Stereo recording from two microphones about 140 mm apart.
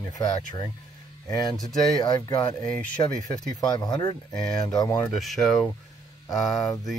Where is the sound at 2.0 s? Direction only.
30° left (ahead or behind).